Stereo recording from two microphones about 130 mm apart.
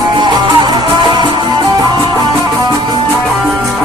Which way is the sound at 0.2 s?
35° right (ahead or behind).